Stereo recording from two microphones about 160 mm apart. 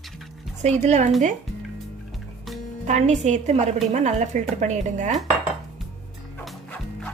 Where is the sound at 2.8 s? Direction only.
45° right (ahead or behind).